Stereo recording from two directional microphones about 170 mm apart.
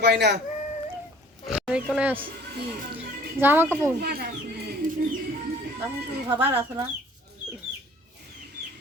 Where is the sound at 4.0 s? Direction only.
70° right (ahead or behind).